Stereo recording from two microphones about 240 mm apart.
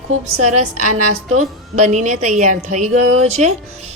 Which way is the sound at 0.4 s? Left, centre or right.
Right.